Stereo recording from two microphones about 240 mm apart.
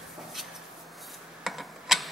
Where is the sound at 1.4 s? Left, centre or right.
Centre.